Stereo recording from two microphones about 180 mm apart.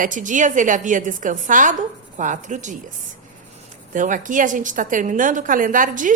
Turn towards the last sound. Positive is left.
turn(degrees=-45)  # may be behind; listen again after turning